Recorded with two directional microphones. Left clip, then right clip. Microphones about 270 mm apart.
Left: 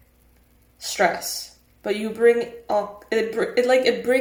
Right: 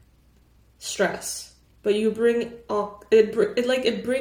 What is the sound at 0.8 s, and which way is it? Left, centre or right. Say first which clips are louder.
Speech: left 4 dB; centre.